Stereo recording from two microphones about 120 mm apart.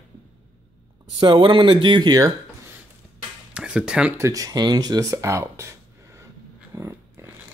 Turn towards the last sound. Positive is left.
turn(degrees=-25)  # may be behind; listen again after turning